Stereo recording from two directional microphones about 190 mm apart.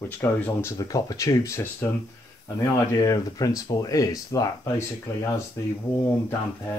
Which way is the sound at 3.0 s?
20° left (ahead or behind).